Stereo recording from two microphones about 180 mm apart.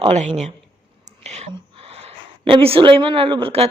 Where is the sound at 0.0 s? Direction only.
35° right (ahead or behind).